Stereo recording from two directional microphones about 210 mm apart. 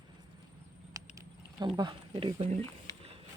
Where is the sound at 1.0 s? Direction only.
15° right (ahead or behind).